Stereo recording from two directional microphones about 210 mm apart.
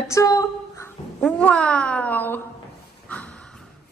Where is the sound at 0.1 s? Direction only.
15° left (ahead or behind).